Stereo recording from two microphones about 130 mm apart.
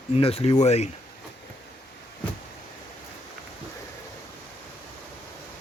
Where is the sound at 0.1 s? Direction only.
50° left (ahead or behind).